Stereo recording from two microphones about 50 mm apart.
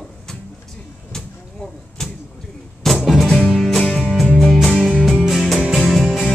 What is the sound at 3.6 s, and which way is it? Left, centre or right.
Music, centre.